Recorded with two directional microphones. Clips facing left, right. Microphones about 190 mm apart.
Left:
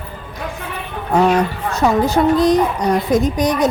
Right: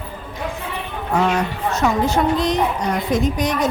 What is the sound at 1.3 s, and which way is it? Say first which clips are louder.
A woman's voice: left 4 dB; 35° left (ahead or behind).